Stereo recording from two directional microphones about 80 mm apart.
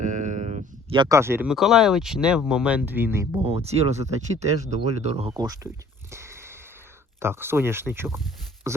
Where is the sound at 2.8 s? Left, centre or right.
Right.